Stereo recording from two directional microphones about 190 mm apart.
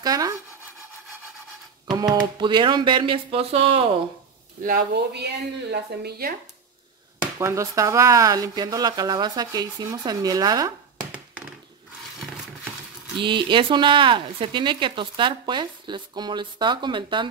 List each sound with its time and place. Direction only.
0.0 s speech: 20° right (ahead or behind)
2.3 s speech: 25° right (ahead or behind)
4.6 s speech: 55° right (ahead or behind)
7.2 s speech: 15° right (ahead or behind)
13.2 s speech: 25° right (ahead or behind)